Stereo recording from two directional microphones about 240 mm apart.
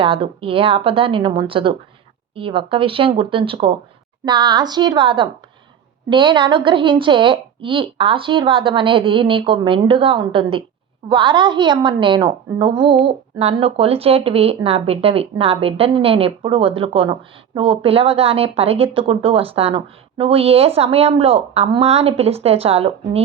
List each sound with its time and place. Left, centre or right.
0.0 s a woman's voice: right